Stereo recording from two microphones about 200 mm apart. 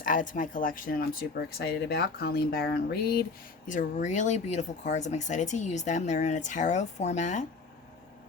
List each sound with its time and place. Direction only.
0.0 s speech: 40° left (ahead or behind)
3.7 s speech: 40° left (ahead or behind)